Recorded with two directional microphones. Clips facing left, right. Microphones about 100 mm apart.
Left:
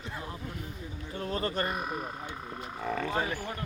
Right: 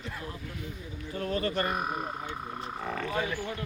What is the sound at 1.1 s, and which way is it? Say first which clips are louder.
Speech: right 2 dB; 30° left (ahead or behind).